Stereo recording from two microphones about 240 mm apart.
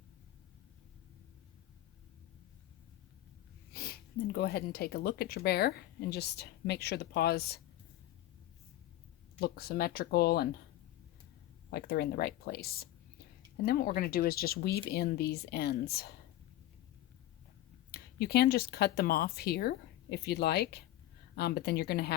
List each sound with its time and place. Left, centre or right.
3.8 s speech: left
9.4 s speech: left
11.7 s speech: left
17.9 s a woman's voice: left